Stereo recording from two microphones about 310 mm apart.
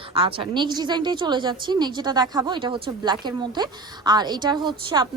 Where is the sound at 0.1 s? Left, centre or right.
Centre.